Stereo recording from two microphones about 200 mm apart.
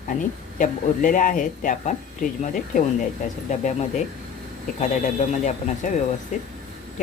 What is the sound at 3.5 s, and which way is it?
Speech, 35° left (ahead or behind).